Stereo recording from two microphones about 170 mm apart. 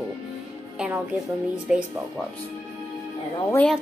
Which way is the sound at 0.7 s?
5° right (ahead or behind).